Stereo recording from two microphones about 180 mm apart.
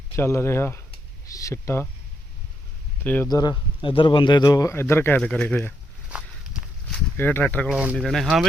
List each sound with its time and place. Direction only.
0.2 s speech: 15° left (ahead or behind)
3.0 s speech: 10° left (ahead or behind)
3.2 s speech: 20° left (ahead or behind); by 5.7 s 5° left (ahead or behind)
6.1 s walk: 5° right (ahead or behind)
7.2 s speech: 10° left (ahead or behind)